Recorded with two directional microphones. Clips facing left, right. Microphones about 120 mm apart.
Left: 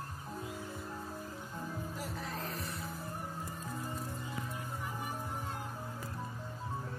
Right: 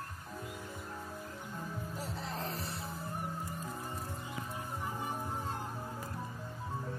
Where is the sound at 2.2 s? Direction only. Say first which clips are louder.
Right 1 dB; 30° right (ahead or behind).